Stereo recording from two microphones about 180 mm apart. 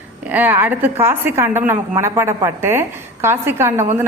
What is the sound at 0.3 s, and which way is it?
A woman's voice, 10° right (ahead or behind).